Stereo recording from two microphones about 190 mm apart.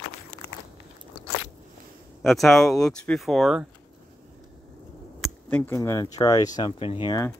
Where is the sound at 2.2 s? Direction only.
Centre (ahead or behind).